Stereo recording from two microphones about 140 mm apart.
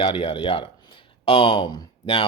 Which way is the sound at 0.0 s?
40° left (ahead or behind).